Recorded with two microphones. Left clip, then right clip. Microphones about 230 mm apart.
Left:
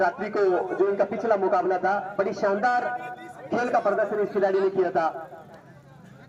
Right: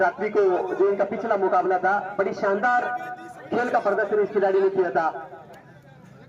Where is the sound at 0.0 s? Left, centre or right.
Centre.